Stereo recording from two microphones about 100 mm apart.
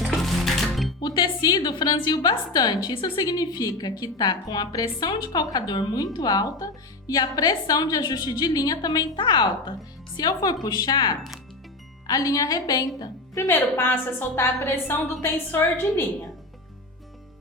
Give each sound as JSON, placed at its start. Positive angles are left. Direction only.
{"t": 0.0, "sound": "music", "side_deg": 0}
{"t": 1.0, "sound": "a woman's voice", "side_deg": 45}
{"t": 13.5, "sound": "a woman's voice", "side_deg": 20}